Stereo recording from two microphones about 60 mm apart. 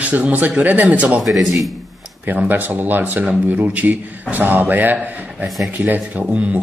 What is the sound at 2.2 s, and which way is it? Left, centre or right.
Speech, right.